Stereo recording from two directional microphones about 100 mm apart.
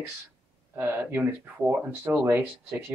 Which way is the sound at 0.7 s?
20° right (ahead or behind).